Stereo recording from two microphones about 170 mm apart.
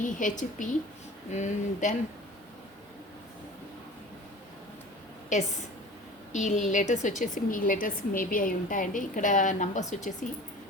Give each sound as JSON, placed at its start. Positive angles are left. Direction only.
{"t": 0.0, "sound": "a woman's voice", "side_deg": 50}
{"t": 5.3, "sound": "a woman's voice", "side_deg": 45}